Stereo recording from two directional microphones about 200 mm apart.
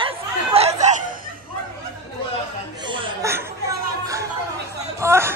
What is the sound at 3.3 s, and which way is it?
Chatter, 15° right (ahead or behind).